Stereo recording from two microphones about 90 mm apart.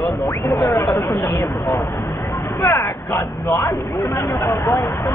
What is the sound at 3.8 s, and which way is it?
Speech, 50° left (ahead or behind).